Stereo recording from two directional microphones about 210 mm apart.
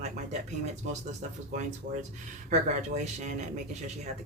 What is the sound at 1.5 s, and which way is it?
Speech, 35° right (ahead or behind).